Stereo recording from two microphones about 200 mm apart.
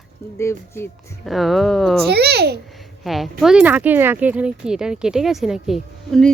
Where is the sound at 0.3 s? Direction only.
15° left (ahead or behind).